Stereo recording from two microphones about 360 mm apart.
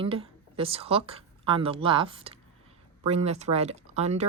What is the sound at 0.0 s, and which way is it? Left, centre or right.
Speech, centre.